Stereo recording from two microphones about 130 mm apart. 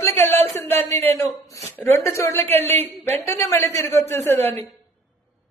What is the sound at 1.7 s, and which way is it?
A man's voice, 20° left (ahead or behind).